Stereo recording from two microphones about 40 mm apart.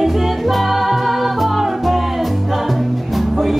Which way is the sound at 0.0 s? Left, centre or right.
Centre.